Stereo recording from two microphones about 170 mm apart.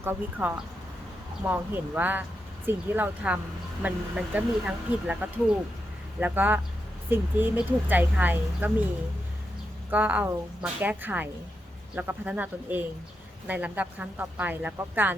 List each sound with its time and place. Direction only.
0.0 s speech: 10° right (ahead or behind)
9.9 s speech: 10° right (ahead or behind)